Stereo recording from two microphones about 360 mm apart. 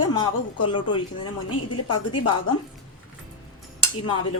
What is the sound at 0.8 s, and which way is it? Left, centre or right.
A woman's voice, left.